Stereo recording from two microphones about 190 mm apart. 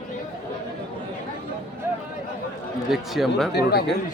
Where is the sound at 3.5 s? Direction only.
55° left (ahead or behind).